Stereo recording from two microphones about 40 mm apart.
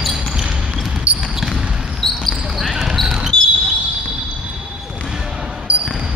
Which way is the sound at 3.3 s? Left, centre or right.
Left.